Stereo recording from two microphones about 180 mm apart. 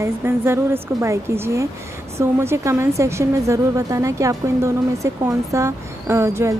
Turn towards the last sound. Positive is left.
turn(degrees=-15)  # may be behind; listen again after turning